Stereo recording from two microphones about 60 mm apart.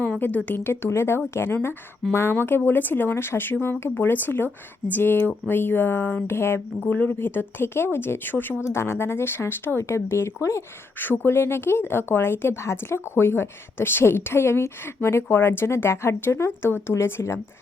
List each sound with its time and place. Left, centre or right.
0.2 s a woman's voice: left
0.6 s speech: left
6.7 s speech: left
8.6 s speech: left
11.0 s speech: left